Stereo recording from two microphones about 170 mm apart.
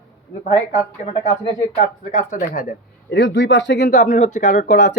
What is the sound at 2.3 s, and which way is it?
Speech, 50° left (ahead or behind).